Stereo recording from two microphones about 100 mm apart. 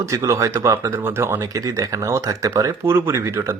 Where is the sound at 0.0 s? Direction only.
30° right (ahead or behind).